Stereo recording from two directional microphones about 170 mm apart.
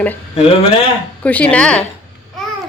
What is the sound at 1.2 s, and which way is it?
Speech, 10° left (ahead or behind).